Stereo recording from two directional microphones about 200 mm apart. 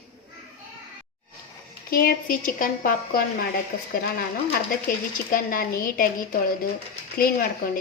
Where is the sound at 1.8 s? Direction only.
45° left (ahead or behind).